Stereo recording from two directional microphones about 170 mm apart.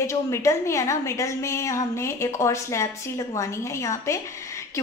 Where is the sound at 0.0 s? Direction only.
15° left (ahead or behind).